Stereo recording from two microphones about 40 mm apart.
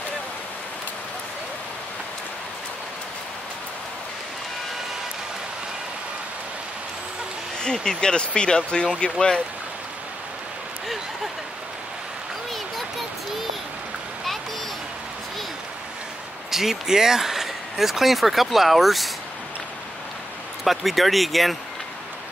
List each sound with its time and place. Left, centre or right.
7.6 s speech: centre
16.4 s speech: centre
20.6 s speech: centre